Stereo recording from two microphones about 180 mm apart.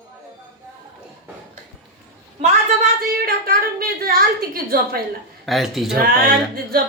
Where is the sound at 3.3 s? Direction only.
55° right (ahead or behind).